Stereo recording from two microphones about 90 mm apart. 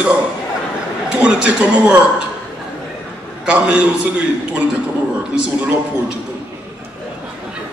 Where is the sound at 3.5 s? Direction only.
10° right (ahead or behind).